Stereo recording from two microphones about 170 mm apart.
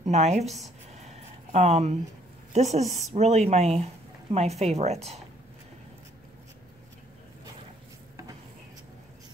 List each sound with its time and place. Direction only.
0.0 s a woman's voice: 40° right (ahead or behind)
0.9 s a sound: 40° right (ahead or behind)
2.5 s a woman's voice: 40° right (ahead or behind)